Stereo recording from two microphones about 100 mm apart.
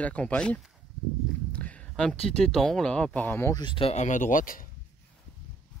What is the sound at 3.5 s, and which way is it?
Speech, 50° left (ahead or behind).